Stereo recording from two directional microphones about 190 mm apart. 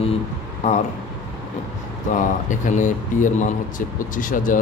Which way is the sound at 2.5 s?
40° left (ahead or behind).